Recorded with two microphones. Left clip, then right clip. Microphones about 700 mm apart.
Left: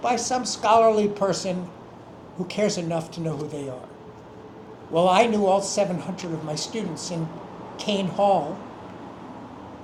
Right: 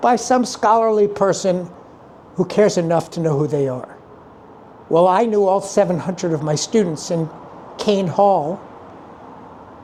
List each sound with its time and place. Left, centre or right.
0.0 s a man's voice: right
4.9 s a man's voice: right